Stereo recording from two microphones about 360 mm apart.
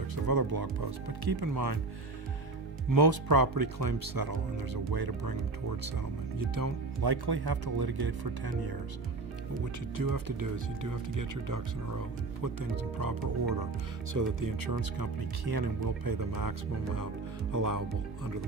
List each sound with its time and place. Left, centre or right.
0.3 s speech: right
2.9 s speech: right
6.5 s speech: right
10.0 s speech: right
14.1 s speech: right
15.4 s speech: right